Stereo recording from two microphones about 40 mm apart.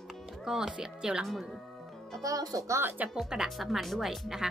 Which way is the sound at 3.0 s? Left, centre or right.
Right.